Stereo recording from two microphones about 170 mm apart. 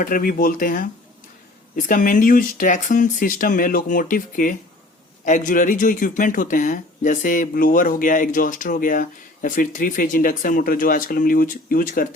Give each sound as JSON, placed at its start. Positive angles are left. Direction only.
{"t": 0.0, "sound": "speech", "side_deg": 55}